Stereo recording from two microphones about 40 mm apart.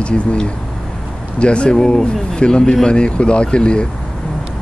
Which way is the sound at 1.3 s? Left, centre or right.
Left.